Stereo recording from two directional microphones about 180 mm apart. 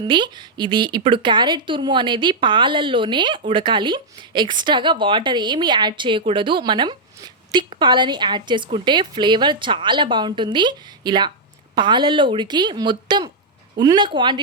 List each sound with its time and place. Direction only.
0.0 s a woman's voice: 25° right (ahead or behind)